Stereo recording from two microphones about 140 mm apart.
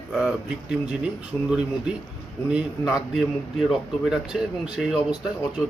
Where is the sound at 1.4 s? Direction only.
5° right (ahead or behind).